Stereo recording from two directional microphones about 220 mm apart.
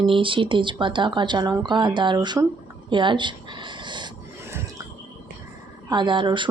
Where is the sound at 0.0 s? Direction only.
25° right (ahead or behind).